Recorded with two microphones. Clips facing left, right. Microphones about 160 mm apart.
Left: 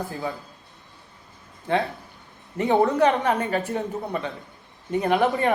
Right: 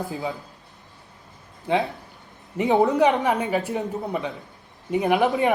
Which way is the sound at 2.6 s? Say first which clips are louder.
Right 1 dB; 15° right (ahead or behind).